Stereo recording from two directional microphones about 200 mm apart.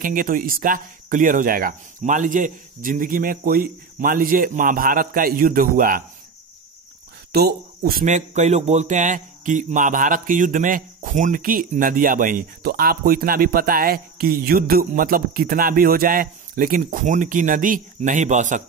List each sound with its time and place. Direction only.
0.0 s speech: 45° right (ahead or behind)
7.3 s speech: 50° right (ahead or behind)